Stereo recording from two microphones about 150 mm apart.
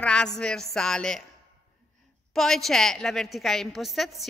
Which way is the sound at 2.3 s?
Centre (ahead or behind).